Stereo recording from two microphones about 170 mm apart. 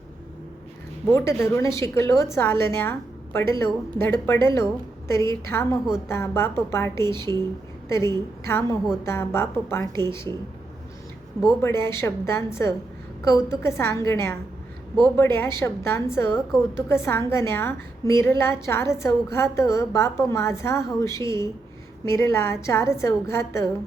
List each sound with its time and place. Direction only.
1.1 s a woman's voice: 15° left (ahead or behind)
11.6 s a woman's voice: 15° left (ahead or behind)